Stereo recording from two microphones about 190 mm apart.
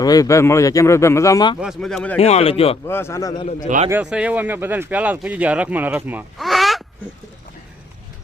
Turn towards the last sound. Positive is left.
turn(degrees=0)  # may be behind; listen again after turning